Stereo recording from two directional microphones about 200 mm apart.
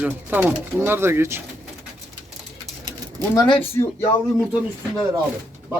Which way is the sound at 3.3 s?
20° left (ahead or behind).